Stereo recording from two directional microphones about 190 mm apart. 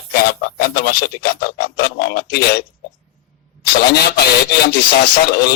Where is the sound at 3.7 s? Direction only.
55° left (ahead or behind).